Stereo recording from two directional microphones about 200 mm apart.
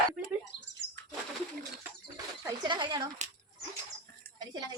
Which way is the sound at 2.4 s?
20° right (ahead or behind).